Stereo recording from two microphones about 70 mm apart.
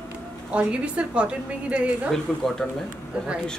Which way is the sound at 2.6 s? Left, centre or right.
Centre.